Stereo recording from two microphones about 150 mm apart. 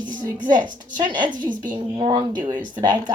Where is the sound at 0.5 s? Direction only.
30° right (ahead or behind).